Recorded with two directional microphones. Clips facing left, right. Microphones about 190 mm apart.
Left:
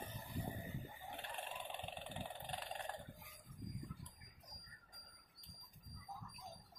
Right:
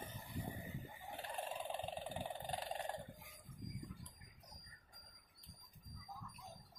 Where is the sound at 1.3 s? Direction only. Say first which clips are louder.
Right 8 dB; 35° right (ahead or behind).